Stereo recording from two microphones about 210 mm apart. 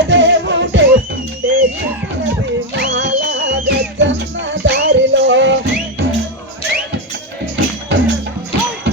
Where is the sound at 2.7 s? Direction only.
60° right (ahead or behind).